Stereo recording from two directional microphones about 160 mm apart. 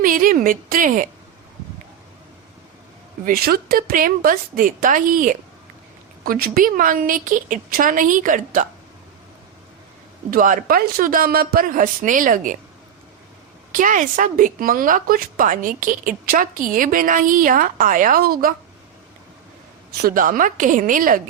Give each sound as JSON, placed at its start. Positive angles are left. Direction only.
{"t": 0.0, "sound": "a woman's voice", "side_deg": -60}
{"t": 3.2, "sound": "a woman's voice", "side_deg": -70}
{"t": 10.3, "sound": "a woman's voice", "side_deg": -60}
{"t": 13.7, "sound": "a woman's voice", "side_deg": -55}
{"t": 20.0, "sound": "a woman's voice", "side_deg": -65}